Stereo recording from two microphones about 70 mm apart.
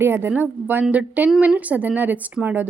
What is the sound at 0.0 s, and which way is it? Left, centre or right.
A woman's voice, right.